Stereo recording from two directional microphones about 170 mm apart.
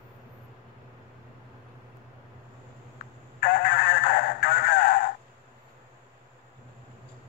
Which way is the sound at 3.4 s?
80° left.